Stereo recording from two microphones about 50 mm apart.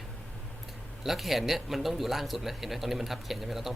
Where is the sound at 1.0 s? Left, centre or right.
Centre.